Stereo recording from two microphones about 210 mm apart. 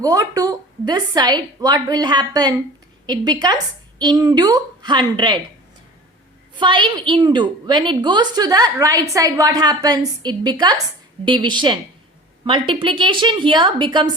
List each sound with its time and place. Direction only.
0.0 s a woman's voice: 15° right (ahead or behind)
6.6 s a woman's voice: 20° right (ahead or behind)